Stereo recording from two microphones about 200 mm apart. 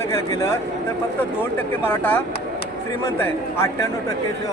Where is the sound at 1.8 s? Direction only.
10° left (ahead or behind).